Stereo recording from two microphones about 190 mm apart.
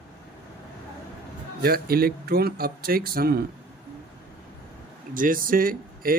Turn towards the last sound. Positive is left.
turn(degrees=-50)  # may be behind; listen again after turning